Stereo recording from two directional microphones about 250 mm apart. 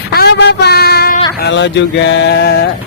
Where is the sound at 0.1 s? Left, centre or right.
Left.